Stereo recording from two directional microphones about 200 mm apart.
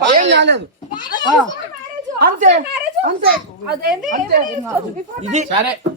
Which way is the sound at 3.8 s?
45° right (ahead or behind).